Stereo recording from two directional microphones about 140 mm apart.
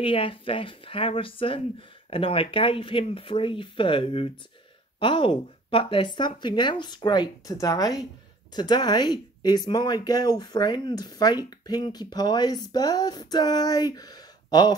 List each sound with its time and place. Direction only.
0.0 s speech: 40° left (ahead or behind)